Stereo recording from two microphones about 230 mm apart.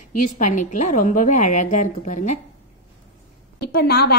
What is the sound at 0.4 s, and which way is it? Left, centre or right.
A woman's voice, left.